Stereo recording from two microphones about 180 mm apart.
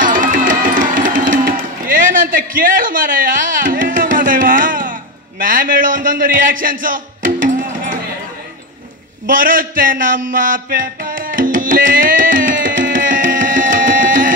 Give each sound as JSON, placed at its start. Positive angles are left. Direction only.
{"t": 0.0, "sound": "music", "side_deg": -50}
{"t": 5.4, "sound": "a man's voice", "side_deg": -50}
{"t": 9.2, "sound": "a sound", "side_deg": -50}